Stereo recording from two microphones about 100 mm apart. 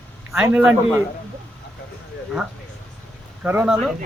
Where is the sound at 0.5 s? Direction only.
10° right (ahead or behind).